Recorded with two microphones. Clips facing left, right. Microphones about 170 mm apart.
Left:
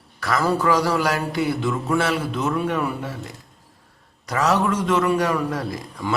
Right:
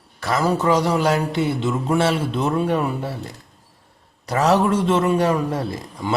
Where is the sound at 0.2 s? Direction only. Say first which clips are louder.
Right 1 dB; 25° right (ahead or behind).